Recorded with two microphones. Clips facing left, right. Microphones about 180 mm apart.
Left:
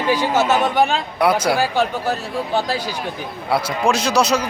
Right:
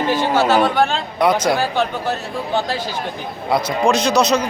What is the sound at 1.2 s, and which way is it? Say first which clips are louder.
Speech: right 1 dB; 5° left (ahead or behind).